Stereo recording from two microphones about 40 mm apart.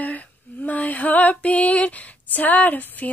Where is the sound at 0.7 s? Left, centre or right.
Left.